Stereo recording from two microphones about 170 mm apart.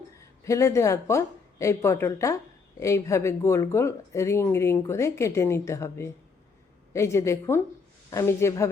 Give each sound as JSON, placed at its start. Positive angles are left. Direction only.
{"t": 0.4, "sound": "speech", "side_deg": 20}